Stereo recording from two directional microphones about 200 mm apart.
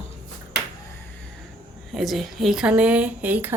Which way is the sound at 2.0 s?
Centre (ahead or behind).